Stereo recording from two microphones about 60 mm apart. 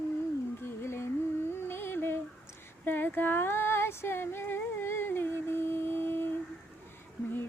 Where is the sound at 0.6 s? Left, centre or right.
Left.